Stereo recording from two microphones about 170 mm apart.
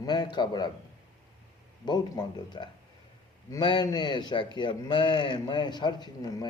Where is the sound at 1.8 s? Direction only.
25° left (ahead or behind).